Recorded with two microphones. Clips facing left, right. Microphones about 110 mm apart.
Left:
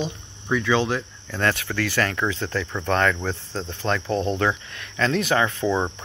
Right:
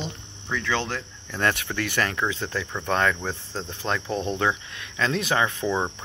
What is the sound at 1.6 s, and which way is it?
Speech, 25° right (ahead or behind).